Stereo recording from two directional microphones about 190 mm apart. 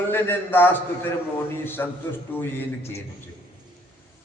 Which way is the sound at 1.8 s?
15° left (ahead or behind).